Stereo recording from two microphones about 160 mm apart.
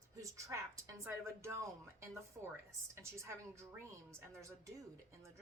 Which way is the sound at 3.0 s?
15° right (ahead or behind).